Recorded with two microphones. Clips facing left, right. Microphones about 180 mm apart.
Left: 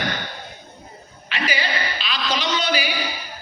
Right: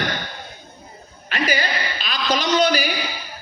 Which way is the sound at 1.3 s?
45° right (ahead or behind).